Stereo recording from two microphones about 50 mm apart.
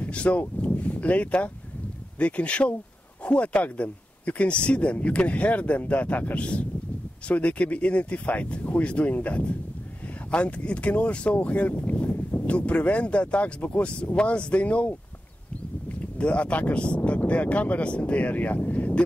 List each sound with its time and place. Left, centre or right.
0.0 s speech: left
16.0 s speech: left